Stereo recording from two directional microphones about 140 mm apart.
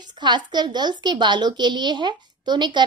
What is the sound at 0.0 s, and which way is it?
A woman's voice, 30° right (ahead or behind).